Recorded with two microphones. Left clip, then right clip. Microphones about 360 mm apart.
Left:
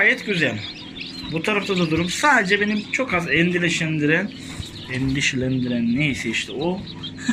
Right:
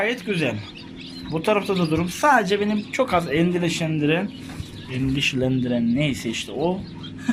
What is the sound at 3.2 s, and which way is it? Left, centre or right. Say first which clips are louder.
Speech: left 3 dB; right.